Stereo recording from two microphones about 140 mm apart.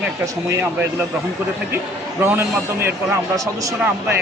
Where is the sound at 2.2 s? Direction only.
15° right (ahead or behind).